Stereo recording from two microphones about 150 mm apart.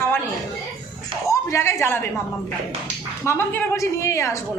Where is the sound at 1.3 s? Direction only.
20° left (ahead or behind).